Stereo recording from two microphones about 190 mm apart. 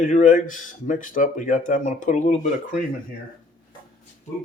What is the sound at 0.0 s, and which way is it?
Speech, 40° left (ahead or behind).